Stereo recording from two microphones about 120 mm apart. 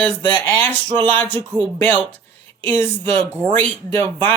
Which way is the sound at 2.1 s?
15° left (ahead or behind).